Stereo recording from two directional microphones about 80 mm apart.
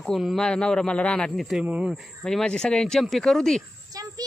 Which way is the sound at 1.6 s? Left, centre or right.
Centre.